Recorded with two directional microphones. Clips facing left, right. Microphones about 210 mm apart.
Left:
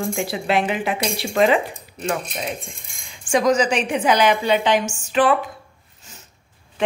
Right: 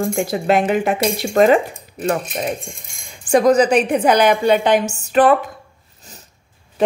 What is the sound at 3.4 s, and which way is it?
A woman's voice, 60° right (ahead or behind).